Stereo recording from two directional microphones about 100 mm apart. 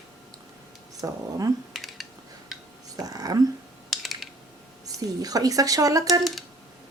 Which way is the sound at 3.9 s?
Centre (ahead or behind).